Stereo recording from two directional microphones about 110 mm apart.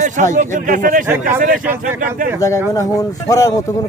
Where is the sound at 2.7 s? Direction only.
35° left (ahead or behind).